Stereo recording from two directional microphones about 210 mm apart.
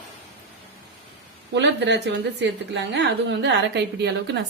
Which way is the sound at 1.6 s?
55° right (ahead or behind).